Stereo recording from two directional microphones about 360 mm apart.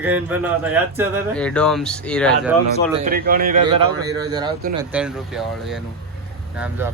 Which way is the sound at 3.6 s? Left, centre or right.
Centre.